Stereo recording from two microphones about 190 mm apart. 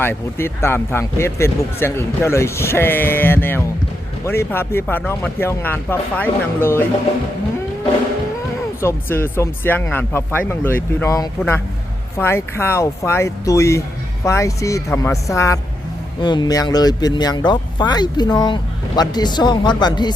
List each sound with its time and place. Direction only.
0.0 s speech: 10° left (ahead or behind)
8.8 s speech: 15° left (ahead or behind)